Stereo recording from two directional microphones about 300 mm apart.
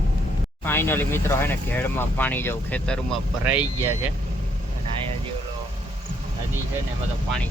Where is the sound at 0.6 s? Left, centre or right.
Centre.